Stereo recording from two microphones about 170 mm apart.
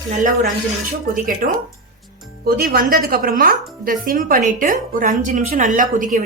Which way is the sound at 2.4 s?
60° right (ahead or behind).